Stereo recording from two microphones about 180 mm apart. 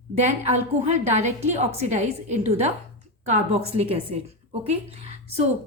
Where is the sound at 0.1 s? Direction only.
35° right (ahead or behind).